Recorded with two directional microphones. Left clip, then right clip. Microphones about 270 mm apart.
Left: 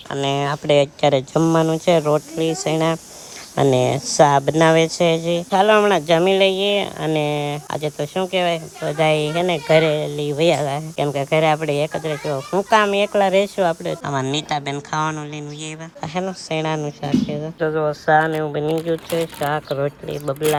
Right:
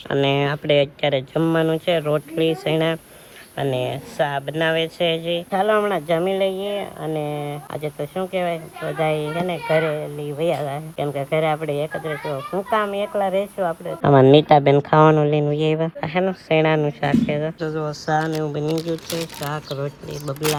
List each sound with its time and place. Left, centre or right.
0.1 s speech: centre
12.3 s a child's voice: left
12.7 s speech: left
14.0 s speech: centre
16.0 s speech: centre
17.6 s speech: centre
18.2 s speech: centre